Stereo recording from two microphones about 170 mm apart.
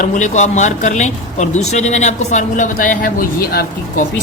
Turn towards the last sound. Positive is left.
turn(degrees=60)  # may be behind; listen again after turning